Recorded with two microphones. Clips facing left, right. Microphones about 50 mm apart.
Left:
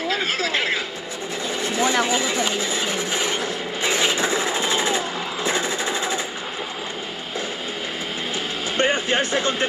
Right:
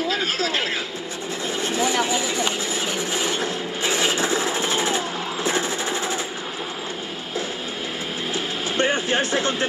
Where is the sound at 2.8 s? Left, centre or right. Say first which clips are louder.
Left 1 dB; left.